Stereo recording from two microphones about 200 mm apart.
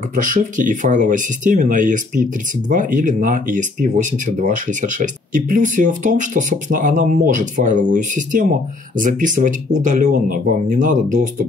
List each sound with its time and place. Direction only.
0.1 s speech: 40° right (ahead or behind)